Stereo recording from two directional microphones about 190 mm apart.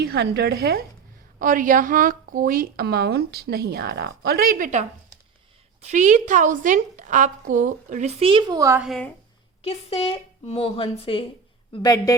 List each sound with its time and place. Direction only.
0.0 s a woman's voice: 55° right (ahead or behind)
1.4 s a woman's voice: 45° right (ahead or behind); by 8.8 s 15° right (ahead or behind)
8.8 s a woman's voice: 5° left (ahead or behind)
9.6 s speech: 30° left (ahead or behind)